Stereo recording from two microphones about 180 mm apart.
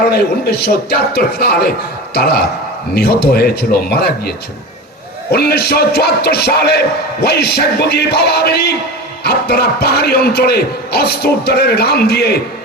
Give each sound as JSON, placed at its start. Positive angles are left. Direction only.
{"t": 0.6, "sound": "speech", "side_deg": 65}
{"t": 5.3, "sound": "speech", "side_deg": 60}